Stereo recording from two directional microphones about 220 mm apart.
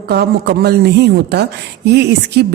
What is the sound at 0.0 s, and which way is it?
A woman's voice, 45° right (ahead or behind).